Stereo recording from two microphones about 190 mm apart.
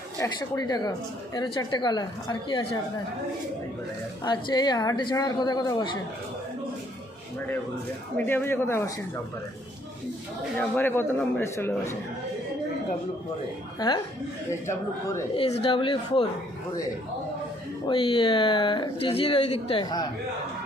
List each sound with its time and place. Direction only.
0.2 s a woman's voice: 20° left (ahead or behind)
4.2 s a woman's voice: 20° left (ahead or behind)
8.1 s speech: 10° left (ahead or behind)
10.6 s speech: 10° left (ahead or behind)
13.7 s a woman's voice: 20° left (ahead or behind)
15.4 s a woman's voice: 30° left (ahead or behind)
17.8 s a woman's voice: 25° left (ahead or behind)